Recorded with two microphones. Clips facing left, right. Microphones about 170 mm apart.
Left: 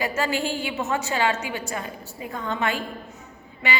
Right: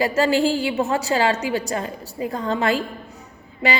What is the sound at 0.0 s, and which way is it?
A woman's voice, 35° right (ahead or behind).